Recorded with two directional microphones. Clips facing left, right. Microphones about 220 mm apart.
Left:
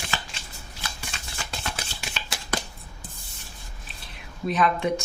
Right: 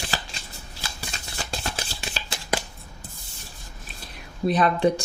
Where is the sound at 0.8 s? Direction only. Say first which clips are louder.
Right 1 dB; 35° right (ahead or behind).